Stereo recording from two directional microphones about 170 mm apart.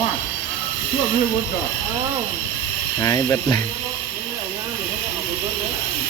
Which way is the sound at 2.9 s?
20° left (ahead or behind).